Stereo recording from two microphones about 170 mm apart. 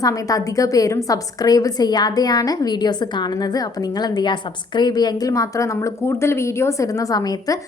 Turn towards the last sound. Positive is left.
turn(degrees=20)  # may be behind; listen again after turning